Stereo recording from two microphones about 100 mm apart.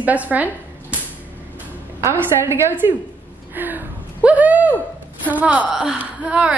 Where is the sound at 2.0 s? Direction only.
25° right (ahead or behind).